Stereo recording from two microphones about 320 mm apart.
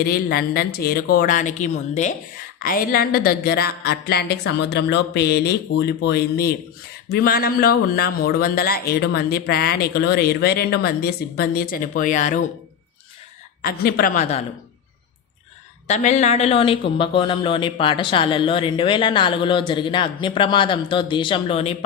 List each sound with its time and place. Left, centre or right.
0.0 s speech: left
13.6 s speech: left
15.9 s speech: left